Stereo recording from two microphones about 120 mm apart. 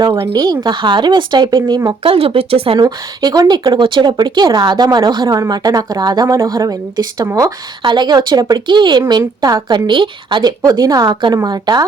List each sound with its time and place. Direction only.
0.1 s a woman's voice: 30° right (ahead or behind); by 2.7 s 55° right (ahead or behind)
2.7 s a woman's voice: 35° right (ahead or behind)
7.9 s a woman's voice: 35° right (ahead or behind)